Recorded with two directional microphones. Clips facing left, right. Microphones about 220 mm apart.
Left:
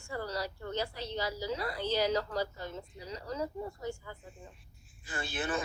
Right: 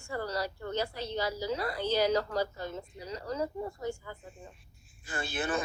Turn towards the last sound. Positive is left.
turn(degrees=-45)  # may be behind; listen again after turning